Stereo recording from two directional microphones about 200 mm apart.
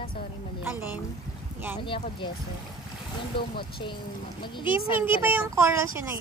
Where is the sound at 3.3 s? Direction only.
25° left (ahead or behind).